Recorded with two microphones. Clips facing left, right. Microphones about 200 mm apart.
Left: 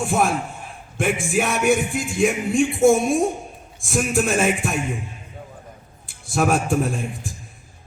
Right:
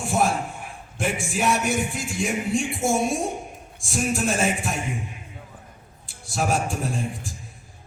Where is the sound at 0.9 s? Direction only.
55° left (ahead or behind).